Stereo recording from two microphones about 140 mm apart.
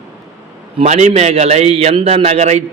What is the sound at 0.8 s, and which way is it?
Speech, 55° right (ahead or behind).